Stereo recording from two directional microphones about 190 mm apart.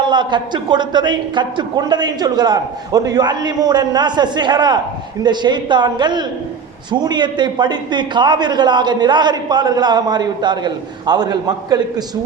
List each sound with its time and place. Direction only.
0.0 s a man's voice: 25° right (ahead or behind)